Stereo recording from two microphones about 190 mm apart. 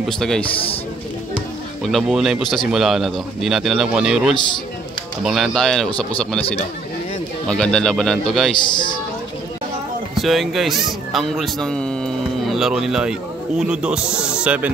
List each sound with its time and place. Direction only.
0.0 s speech: centre (ahead or behind)
1.8 s speech: centre (ahead or behind)
7.4 s speech: 5° left (ahead or behind)
8.5 s a man's voice: 25° left (ahead or behind)
10.1 s a man's voice: centre (ahead or behind)